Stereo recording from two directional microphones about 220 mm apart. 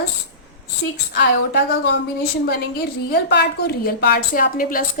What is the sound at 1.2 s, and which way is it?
A woman's voice, 50° left (ahead or behind).